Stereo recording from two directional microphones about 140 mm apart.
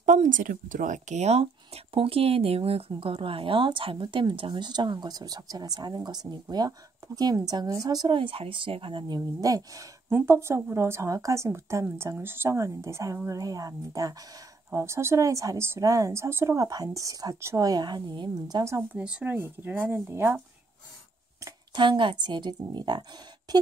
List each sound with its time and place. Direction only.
0.0 s a woman's voice: 65° right (ahead or behind); by 18.6 s 30° right (ahead or behind)
18.8 s a woman's voice: 5° right (ahead or behind)
21.7 s a woman's voice: 35° right (ahead or behind)